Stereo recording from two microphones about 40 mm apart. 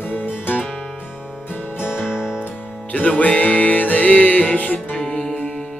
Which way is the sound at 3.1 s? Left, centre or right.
Left.